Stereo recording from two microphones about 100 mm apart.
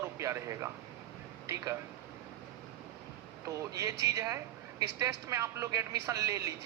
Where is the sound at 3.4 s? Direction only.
35° right (ahead or behind).